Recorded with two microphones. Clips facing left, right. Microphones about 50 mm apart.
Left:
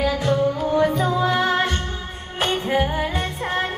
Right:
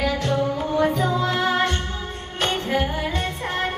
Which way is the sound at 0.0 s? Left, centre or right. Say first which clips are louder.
Left 2 dB; centre.